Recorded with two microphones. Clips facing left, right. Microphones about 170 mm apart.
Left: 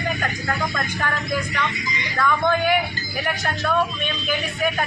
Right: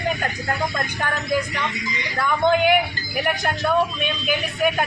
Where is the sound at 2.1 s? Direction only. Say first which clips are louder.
Right 2 dB; 20° right (ahead or behind).